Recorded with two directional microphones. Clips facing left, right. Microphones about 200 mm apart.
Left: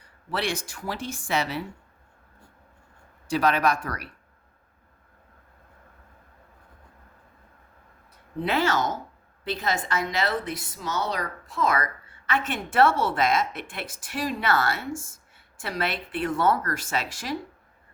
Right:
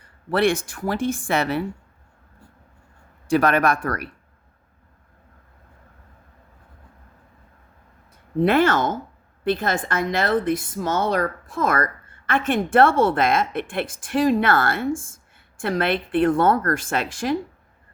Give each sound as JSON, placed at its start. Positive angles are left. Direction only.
{"t": 0.3, "sound": "a woman's voice", "side_deg": -55}
{"t": 3.2, "sound": "a woman's voice", "side_deg": -55}
{"t": 8.4, "sound": "a woman's voice", "side_deg": -55}